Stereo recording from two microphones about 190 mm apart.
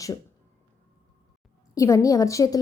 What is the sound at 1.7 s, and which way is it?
Speech, 15° left (ahead or behind).